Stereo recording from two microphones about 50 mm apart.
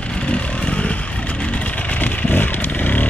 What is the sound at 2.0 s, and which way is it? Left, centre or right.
Vehicle, left.